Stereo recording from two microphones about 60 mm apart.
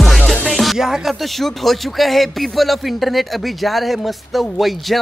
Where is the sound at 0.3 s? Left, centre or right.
Centre.